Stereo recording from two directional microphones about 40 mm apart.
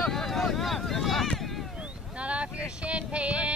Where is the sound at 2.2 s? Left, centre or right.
Right.